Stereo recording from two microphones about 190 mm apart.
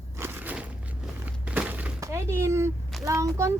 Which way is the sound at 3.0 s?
15° right (ahead or behind).